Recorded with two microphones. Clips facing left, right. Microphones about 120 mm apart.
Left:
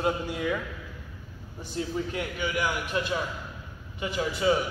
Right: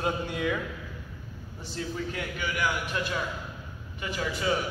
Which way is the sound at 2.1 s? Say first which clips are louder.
Left 3 dB; 20° left (ahead or behind).